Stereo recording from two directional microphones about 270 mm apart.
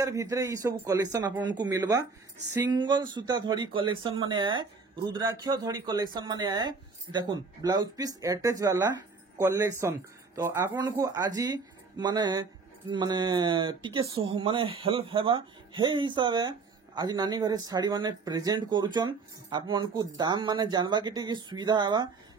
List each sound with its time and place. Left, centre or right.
0.0 s speech: centre